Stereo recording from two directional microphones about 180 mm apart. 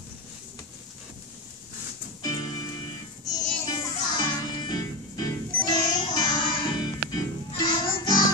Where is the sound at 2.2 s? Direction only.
20° left (ahead or behind).